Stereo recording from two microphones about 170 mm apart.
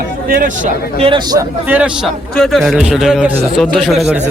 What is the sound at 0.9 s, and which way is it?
Speech, 30° right (ahead or behind).